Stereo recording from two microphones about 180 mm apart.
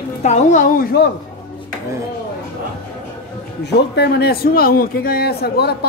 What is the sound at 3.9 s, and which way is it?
A man's voice, 70° left (ahead or behind).